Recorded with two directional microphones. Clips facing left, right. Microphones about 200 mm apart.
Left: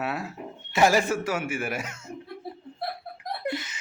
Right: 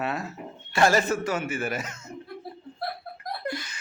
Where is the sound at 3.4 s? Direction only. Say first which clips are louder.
Left 3 dB; 20° left (ahead or behind).